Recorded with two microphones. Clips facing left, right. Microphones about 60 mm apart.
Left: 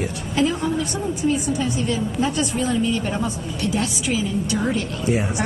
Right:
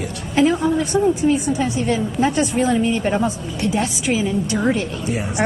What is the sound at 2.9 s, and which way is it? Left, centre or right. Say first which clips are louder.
Speech: right 4 dB; right.